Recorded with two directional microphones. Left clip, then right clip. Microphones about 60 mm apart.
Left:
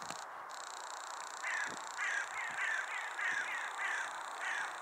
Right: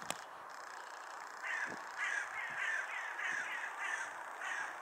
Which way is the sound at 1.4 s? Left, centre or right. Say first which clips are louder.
Left 1 dB; left.